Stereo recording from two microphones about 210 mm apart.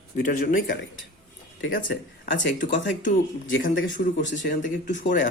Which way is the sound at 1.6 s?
65° left (ahead or behind).